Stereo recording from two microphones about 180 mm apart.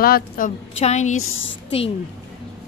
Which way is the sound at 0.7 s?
40° left (ahead or behind).